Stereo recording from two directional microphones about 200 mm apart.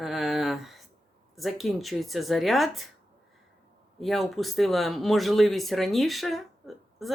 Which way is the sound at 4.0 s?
Centre (ahead or behind).